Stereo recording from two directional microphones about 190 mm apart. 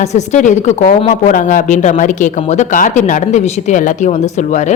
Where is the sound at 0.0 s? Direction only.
35° left (ahead or behind).